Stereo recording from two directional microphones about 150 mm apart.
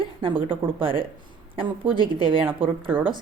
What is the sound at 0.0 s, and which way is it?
A woman's voice, 35° right (ahead or behind).